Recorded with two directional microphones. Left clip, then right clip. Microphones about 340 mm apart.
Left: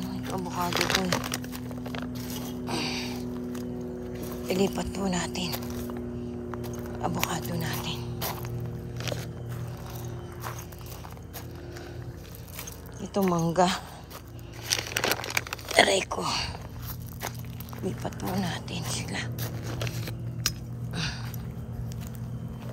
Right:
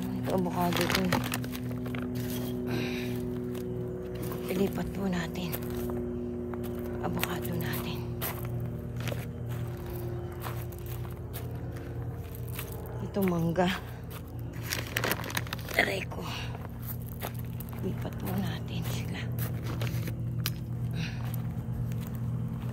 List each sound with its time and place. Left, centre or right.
0.0 s a sound: centre
0.7 s speech: centre
1.9 s vehicle: left
2.6 s music: centre
4.5 s speech: centre
6.5 s music: centre
13.0 s speech: centre
14.7 s crumpling: centre
17.8 s a sound: centre